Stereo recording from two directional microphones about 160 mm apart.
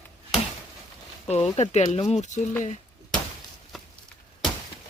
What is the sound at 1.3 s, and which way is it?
Speech, 45° left (ahead or behind).